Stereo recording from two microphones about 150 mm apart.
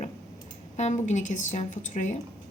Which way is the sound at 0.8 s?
50° left (ahead or behind).